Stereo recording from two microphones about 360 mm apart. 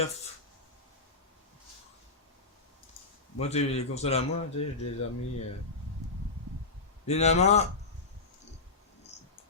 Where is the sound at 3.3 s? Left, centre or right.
Centre.